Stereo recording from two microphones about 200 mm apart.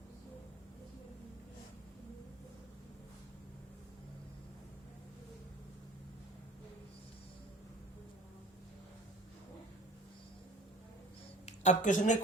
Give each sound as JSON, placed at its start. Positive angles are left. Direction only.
{"t": 11.4, "sound": "speech", "side_deg": 35}